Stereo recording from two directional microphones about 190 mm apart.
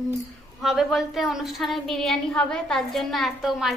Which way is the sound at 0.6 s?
Centre (ahead or behind).